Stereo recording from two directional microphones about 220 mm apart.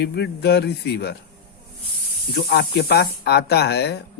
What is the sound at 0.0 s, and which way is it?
Speech, 50° left (ahead or behind).